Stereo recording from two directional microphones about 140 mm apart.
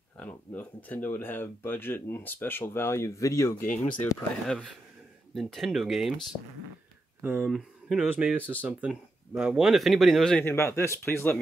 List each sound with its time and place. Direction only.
0.2 s speech: 10° left (ahead or behind)
3.5 s speech: 70° left (ahead or behind)
5.3 s speech: centre (ahead or behind)
7.2 s speech: 15° right (ahead or behind)
7.4 s speech: 5° right (ahead or behind)
10.4 s speech: 20° left (ahead or behind)